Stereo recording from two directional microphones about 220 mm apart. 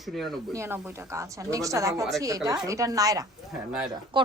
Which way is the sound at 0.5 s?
10° right (ahead or behind).